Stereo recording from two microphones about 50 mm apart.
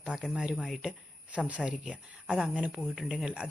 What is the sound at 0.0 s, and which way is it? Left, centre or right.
Speech, centre.